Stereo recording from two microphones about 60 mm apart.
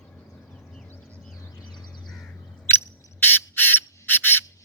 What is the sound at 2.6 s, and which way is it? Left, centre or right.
Bird, left.